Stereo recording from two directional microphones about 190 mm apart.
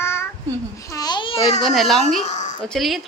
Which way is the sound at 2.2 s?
40° left (ahead or behind).